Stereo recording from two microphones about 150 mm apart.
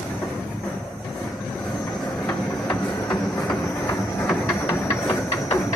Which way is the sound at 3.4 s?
10° left (ahead or behind).